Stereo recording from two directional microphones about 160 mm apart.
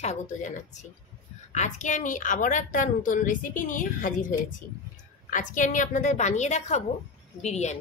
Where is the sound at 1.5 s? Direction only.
50° left (ahead or behind).